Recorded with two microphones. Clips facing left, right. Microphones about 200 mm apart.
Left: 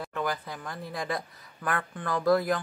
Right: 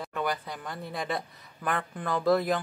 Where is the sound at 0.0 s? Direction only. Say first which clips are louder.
Even; centre (ahead or behind).